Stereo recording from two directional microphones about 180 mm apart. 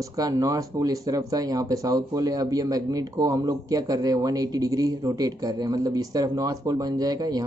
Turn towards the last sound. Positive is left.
turn(degrees=-20)  # may be behind; listen again after turning